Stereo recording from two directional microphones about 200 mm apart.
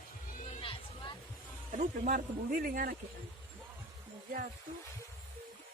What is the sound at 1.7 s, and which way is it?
Speech, 40° right (ahead or behind).